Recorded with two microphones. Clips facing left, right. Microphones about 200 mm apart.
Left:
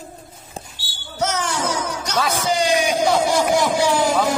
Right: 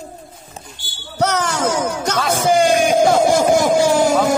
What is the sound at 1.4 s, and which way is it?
Music, 50° right (ahead or behind).